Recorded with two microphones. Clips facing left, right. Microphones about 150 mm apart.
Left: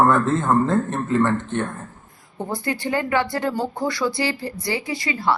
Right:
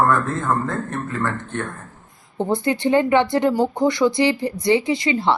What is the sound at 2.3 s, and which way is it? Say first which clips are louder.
Speech: right 5 dB; 20° right (ahead or behind).